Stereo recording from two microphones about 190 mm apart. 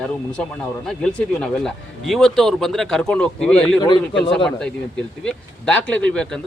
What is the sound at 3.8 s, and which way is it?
Speech, 25° left (ahead or behind).